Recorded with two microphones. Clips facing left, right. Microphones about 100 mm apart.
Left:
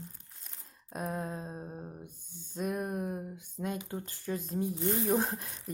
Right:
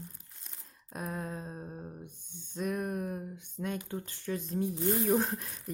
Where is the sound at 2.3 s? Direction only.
40° left (ahead or behind).